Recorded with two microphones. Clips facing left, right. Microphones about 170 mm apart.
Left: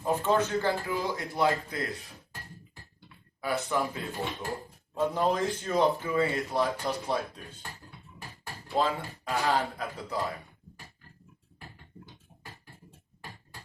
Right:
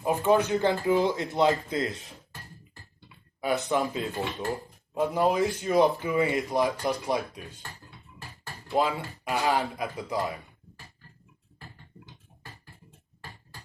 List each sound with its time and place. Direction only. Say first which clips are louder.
0.0 s speech: right 3 dB; 15° right (ahead or behind)
3.4 s speech: right 3 dB; 20° right (ahead or behind)
8.6 s speech: right 2 dB; 15° right (ahead or behind)